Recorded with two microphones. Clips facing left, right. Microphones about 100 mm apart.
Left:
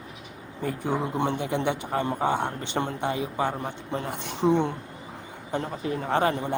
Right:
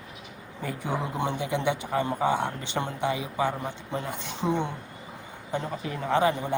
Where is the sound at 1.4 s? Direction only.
50° left (ahead or behind).